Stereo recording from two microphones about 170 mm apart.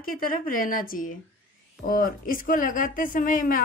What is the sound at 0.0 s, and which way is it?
A woman's voice, 55° left (ahead or behind).